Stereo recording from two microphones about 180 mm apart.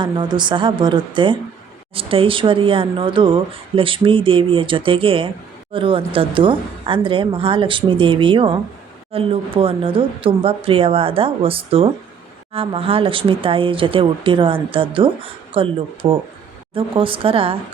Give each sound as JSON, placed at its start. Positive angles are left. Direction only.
{"t": 0.0, "sound": "speech", "side_deg": -25}